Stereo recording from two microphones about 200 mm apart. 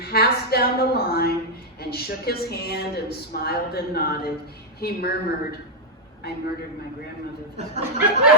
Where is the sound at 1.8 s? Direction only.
50° left (ahead or behind).